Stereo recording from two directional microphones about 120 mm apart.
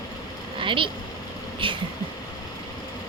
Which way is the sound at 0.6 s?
45° right (ahead or behind).